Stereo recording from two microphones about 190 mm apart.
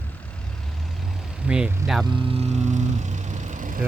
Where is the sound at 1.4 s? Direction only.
5° right (ahead or behind).